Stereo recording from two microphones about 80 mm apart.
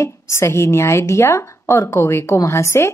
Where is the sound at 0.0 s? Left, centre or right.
Left.